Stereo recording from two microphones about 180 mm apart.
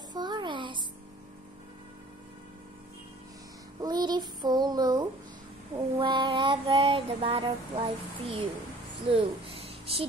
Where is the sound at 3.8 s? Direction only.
25° right (ahead or behind).